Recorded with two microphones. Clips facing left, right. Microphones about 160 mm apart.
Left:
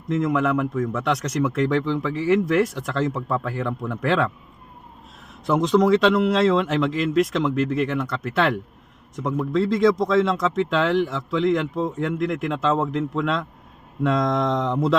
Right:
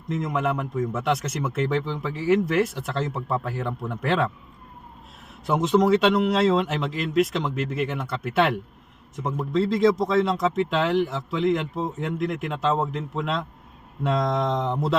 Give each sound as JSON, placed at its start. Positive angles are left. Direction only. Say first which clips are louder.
{"t": 0.1, "sound": "speech", "louder": "left 5 dB", "side_deg": 0}
{"t": 5.5, "sound": "speech", "louder": "left 2 dB", "side_deg": -5}